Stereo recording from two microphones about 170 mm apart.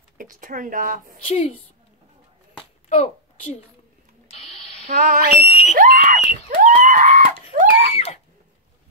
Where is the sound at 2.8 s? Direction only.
45° left (ahead or behind).